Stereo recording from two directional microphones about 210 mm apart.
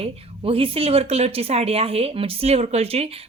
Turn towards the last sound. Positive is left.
turn(degrees=-30)  # may be behind; listen again after turning